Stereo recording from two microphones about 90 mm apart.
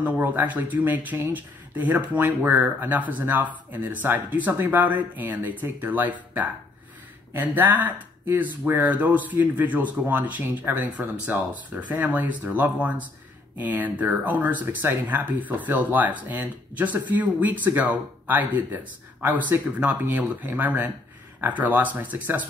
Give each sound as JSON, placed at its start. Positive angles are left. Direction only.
{"t": 0.0, "sound": "speech", "side_deg": -20}
{"t": 19.8, "sound": "speech", "side_deg": -15}